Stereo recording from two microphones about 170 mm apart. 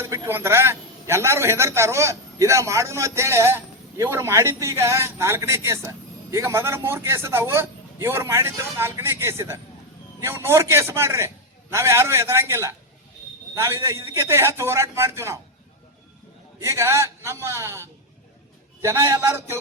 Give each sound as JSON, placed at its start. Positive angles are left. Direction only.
{"t": 0.0, "sound": "a man's voice", "side_deg": -15}
{"t": 16.6, "sound": "a man's voice", "side_deg": -15}